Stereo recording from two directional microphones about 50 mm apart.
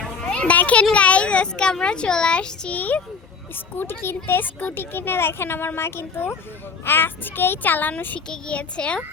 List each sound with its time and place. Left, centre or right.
0.3 s a sound: left
0.5 s a child's voice: left
3.5 s a child's voice: left
8.3 s speech: left